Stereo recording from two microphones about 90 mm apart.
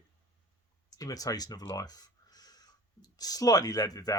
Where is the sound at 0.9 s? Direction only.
45° left (ahead or behind).